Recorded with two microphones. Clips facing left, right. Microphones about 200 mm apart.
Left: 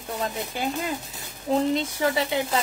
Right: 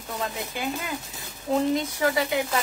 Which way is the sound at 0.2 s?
35° left (ahead or behind).